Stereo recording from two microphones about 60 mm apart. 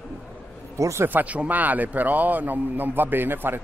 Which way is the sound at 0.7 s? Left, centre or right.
Right.